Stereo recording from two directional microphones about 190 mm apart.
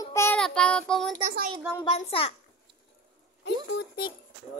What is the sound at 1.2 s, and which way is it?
Speech, 45° right (ahead or behind).